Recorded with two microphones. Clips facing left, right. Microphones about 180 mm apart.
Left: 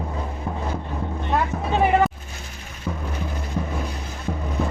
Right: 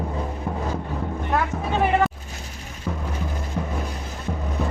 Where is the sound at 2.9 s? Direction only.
Centre (ahead or behind).